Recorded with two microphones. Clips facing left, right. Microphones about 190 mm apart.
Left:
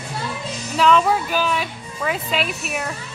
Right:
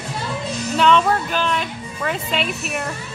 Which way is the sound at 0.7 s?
5° left (ahead or behind).